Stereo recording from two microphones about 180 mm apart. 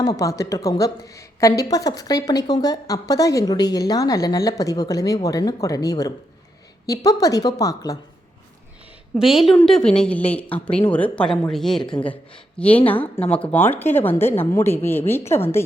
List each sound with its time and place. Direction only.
0.0 s a woman's voice: 20° left (ahead or behind)
9.1 s a woman's voice: centre (ahead or behind)
11.8 s a woman's voice: 25° left (ahead or behind)
12.5 s a woman's voice: 10° left (ahead or behind)